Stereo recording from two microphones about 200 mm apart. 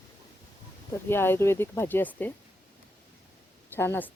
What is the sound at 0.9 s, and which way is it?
Speech, 10° left (ahead or behind).